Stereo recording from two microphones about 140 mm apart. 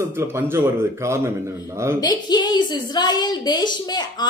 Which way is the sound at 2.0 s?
30° left (ahead or behind).